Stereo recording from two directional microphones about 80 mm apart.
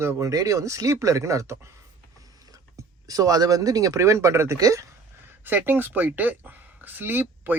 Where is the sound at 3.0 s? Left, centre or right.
Right.